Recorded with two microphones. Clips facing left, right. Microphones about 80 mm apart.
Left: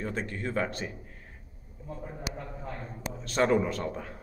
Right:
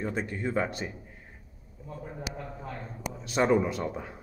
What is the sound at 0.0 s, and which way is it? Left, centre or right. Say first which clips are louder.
Speech: right 2 dB; centre.